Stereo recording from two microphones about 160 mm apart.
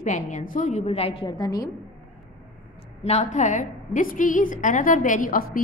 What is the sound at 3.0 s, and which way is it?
A woman's voice, 45° left (ahead or behind).